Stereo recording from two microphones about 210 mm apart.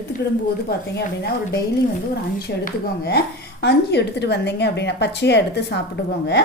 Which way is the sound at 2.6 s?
50° left (ahead or behind).